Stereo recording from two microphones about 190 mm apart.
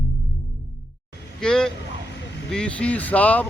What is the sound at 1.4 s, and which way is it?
Vehicle, 5° left (ahead or behind).